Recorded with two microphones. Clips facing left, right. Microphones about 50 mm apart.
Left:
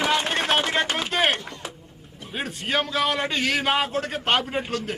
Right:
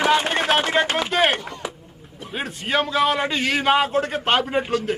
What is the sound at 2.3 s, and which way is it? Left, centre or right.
A man's voice, centre.